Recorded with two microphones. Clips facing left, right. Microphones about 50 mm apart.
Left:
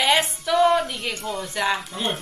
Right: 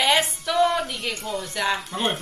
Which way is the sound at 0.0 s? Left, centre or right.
Centre.